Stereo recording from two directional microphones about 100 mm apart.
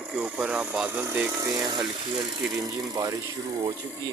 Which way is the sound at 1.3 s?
30° right (ahead or behind).